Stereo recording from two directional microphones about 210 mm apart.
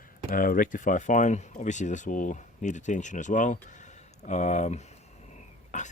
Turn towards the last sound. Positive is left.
turn(degrees=35)  # may be behind; listen again after turning